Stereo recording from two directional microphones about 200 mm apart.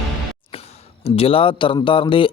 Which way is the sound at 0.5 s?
30° left (ahead or behind).